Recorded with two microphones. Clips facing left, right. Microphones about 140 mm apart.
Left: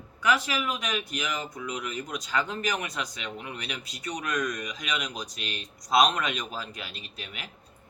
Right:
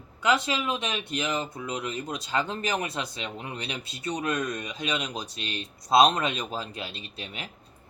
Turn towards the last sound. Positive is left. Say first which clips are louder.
# right 3 dB
turn(degrees=-30)  # may be behind; listen again after turning